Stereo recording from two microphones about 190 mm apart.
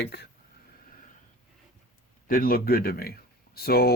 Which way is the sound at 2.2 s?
45° left (ahead or behind).